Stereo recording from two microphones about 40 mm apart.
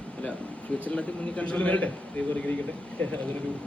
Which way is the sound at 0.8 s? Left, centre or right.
Left.